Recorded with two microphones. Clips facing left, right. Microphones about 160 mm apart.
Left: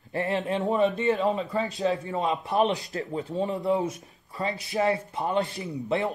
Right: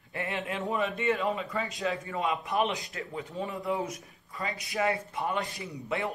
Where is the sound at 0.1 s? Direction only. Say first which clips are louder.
Left 7 dB; 35° left (ahead or behind).